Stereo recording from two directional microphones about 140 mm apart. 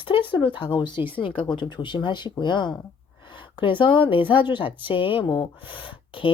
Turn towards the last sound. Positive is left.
turn(degrees=40)  # may be behind; listen again after turning